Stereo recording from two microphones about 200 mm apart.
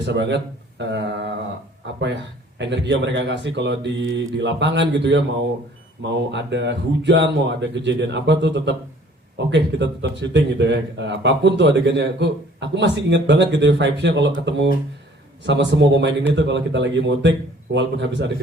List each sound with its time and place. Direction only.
0.0 s speech: 60° right (ahead or behind)
2.6 s speech: 60° right (ahead or behind)